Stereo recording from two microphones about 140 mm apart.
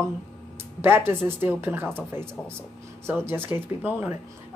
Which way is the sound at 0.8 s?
15° right (ahead or behind).